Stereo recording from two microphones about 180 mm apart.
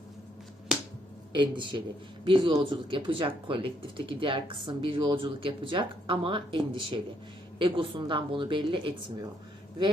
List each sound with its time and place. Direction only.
1.3 s speech: 25° right (ahead or behind)